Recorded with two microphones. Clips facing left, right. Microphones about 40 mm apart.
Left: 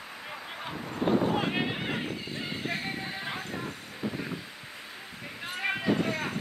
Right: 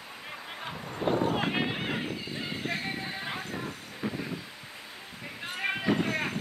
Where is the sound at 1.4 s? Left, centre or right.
Centre.